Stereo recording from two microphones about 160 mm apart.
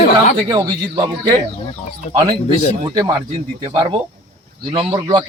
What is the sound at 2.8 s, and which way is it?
Speech, 20° right (ahead or behind).